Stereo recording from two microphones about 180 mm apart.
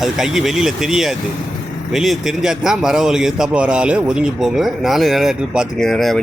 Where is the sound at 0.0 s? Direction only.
Centre (ahead or behind).